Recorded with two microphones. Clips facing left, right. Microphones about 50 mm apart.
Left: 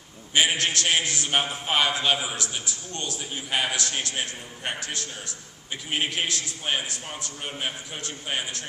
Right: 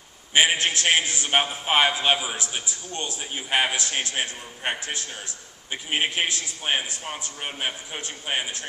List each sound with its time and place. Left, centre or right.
0.3 s a man's voice: right